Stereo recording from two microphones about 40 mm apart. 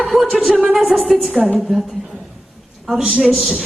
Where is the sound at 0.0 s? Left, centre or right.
Centre.